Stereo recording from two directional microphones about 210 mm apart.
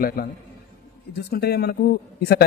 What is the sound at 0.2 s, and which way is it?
Speech, 45° left (ahead or behind).